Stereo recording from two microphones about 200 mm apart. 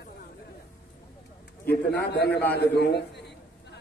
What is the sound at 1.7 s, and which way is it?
Speech, 55° left (ahead or behind).